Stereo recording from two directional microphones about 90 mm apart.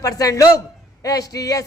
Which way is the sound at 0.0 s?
40° left (ahead or behind).